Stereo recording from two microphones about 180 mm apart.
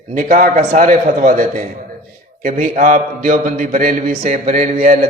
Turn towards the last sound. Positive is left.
turn(degrees=-45)  # may be behind; listen again after turning